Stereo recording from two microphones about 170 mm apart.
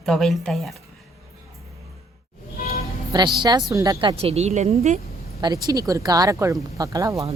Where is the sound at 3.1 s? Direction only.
20° right (ahead or behind); by 5.0 s 40° right (ahead or behind).